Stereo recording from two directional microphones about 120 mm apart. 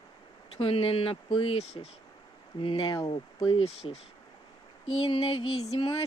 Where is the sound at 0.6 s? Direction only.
50° left (ahead or behind).